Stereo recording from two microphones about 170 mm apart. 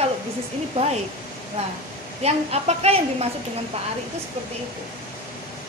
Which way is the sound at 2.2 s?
40° right (ahead or behind).